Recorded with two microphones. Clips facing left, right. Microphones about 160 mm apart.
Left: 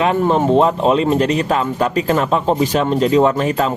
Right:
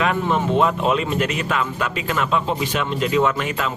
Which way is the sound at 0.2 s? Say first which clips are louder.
Left 6 dB; 40° left (ahead or behind).